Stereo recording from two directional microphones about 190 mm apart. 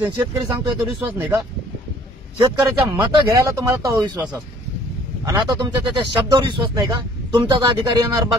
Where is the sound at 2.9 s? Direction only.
15° right (ahead or behind).